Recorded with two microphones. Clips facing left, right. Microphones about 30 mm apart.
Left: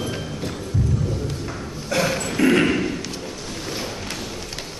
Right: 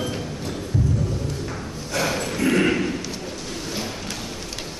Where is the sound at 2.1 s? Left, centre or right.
Centre.